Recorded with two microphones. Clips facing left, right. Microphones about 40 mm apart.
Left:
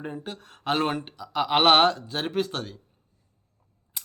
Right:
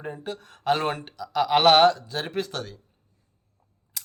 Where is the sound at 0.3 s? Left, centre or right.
Left.